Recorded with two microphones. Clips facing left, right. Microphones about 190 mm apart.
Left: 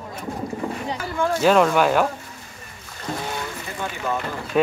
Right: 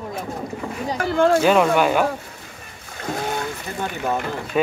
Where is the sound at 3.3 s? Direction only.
55° right (ahead or behind).